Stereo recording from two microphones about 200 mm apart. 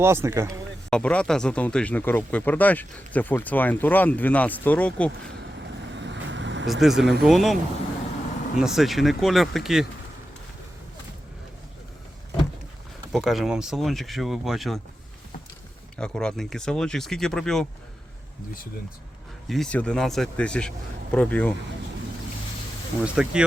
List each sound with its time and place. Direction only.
0.0 s speech: 10° right (ahead or behind)
0.9 s speech: 5° left (ahead or behind)
5.9 s vehicle: 65° right (ahead or behind)
6.7 s a man's voice: centre (ahead or behind)
13.1 s a man's voice: centre (ahead or behind)
16.0 s a man's voice: 5° left (ahead or behind)
19.5 s a man's voice: 5° left (ahead or behind)
23.0 s a man's voice: 5° right (ahead or behind)